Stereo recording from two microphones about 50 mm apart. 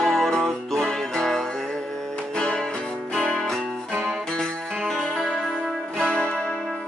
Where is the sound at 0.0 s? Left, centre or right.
Centre.